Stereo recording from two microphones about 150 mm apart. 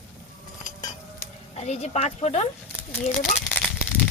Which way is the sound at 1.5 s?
45° left (ahead or behind).